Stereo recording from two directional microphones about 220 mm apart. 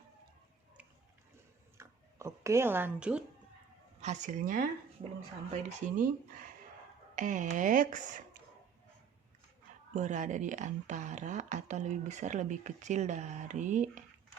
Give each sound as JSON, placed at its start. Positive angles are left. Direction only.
{"t": 1.8, "sound": "speech", "side_deg": -10}
{"t": 4.0, "sound": "speech", "side_deg": -30}
{"t": 7.2, "sound": "speech", "side_deg": -35}
{"t": 9.9, "sound": "speech", "side_deg": -35}